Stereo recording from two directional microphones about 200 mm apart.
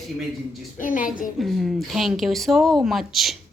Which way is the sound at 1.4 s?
Centre (ahead or behind).